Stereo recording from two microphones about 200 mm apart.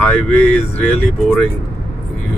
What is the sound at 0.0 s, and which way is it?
Speech, 5° left (ahead or behind).